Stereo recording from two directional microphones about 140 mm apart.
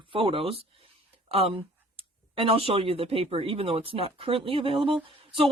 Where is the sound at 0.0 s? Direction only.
40° right (ahead or behind).